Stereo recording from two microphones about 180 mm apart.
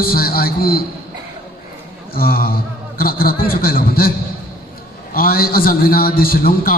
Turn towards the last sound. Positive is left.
turn(degrees=55)  # may be behind; listen again after turning